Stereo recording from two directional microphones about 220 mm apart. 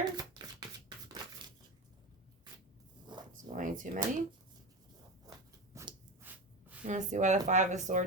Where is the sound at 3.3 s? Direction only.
35° right (ahead or behind).